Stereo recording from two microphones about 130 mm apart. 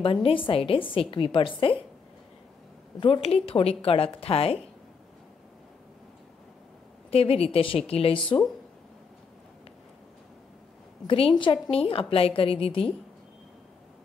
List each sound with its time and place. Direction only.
0.0 s a woman's voice: 45° left (ahead or behind)
3.0 s a woman's voice: 45° left (ahead or behind)
7.1 s a woman's voice: 50° left (ahead or behind)
11.1 s a woman's voice: 45° left (ahead or behind)